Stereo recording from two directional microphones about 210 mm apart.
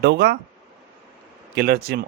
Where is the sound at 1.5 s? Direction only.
50° right (ahead or behind).